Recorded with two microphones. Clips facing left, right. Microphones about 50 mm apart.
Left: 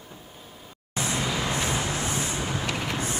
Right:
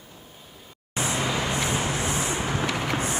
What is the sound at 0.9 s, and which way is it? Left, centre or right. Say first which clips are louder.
Vehicle: right 2 dB; right.